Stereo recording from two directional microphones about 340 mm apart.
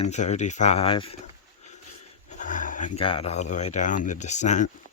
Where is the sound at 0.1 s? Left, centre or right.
Centre.